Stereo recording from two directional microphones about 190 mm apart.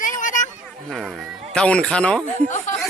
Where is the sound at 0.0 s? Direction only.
45° left (ahead or behind).